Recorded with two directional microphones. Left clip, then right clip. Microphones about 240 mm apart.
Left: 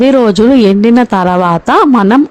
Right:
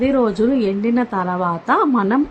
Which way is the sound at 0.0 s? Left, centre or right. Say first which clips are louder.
Left 10 dB; left.